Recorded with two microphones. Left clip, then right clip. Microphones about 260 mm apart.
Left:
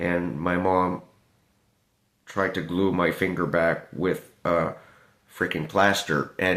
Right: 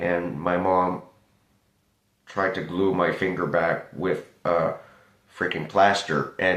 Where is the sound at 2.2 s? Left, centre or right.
Left.